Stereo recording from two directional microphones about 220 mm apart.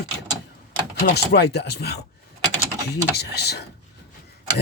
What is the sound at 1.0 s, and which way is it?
Speech, 50° left (ahead or behind).